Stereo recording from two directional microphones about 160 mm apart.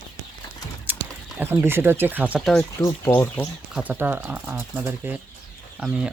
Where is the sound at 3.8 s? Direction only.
10° right (ahead or behind).